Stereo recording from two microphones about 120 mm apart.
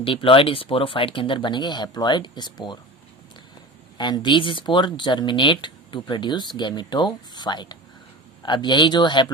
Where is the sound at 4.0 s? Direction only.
40° left (ahead or behind).